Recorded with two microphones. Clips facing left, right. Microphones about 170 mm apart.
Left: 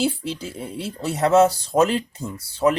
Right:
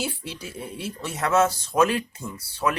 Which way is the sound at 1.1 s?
30° left (ahead or behind).